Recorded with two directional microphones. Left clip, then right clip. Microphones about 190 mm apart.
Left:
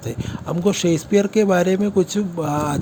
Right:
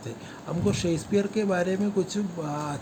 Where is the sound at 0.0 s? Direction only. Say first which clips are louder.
Left 9 dB; 35° left (ahead or behind).